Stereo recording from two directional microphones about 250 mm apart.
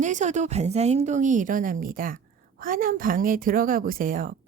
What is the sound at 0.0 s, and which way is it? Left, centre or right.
A woman's voice, right.